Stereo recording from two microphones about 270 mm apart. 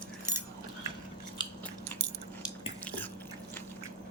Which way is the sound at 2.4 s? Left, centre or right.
Centre.